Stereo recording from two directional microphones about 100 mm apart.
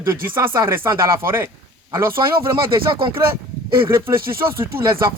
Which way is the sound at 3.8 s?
25° right (ahead or behind).